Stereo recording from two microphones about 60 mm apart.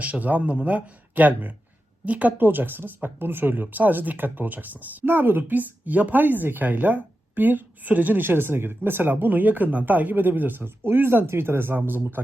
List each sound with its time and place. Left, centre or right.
0.0 s speech: right